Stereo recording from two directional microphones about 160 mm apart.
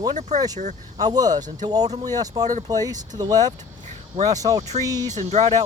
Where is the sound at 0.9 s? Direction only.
25° right (ahead or behind).